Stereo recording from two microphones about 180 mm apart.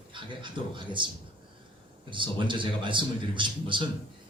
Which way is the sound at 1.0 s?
25° right (ahead or behind).